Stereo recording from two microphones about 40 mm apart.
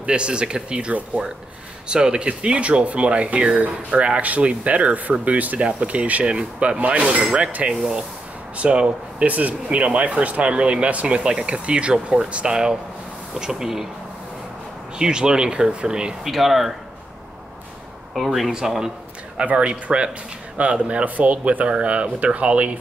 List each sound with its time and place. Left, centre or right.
0.0 s speech: right
6.2 s speech: right
13.3 s speech: centre
15.0 s speech: centre
16.3 s speech: centre
18.1 s speech: centre
18.5 s speech: centre
19.5 s speech: right
20.6 s speech: right